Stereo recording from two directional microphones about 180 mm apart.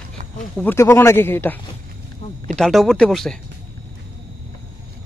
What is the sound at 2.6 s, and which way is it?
Speech, centre (ahead or behind).